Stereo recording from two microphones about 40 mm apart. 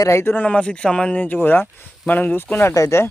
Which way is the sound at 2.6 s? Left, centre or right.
Left.